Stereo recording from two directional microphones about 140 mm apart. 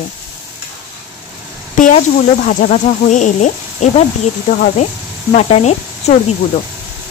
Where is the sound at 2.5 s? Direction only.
55° left (ahead or behind).